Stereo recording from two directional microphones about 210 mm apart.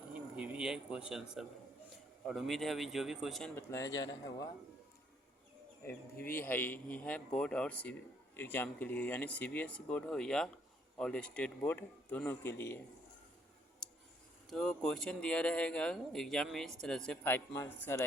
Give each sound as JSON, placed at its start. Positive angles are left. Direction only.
{"t": 0.1, "sound": "a sound", "side_deg": -5}
{"t": 1.4, "sound": "speech", "side_deg": 0}
{"t": 3.7, "sound": "speech", "side_deg": 15}
{"t": 5.8, "sound": "speech", "side_deg": 10}
{"t": 13.8, "sound": "clicking", "side_deg": 5}
{"t": 14.5, "sound": "speech", "side_deg": 0}